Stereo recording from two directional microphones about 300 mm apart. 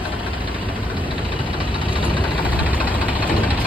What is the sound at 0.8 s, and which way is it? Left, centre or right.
Engine, centre.